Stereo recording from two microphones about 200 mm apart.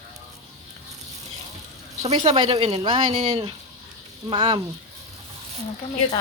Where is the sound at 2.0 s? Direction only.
25° right (ahead or behind).